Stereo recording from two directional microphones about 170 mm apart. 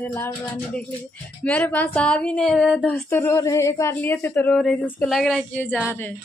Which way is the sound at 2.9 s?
15° left (ahead or behind).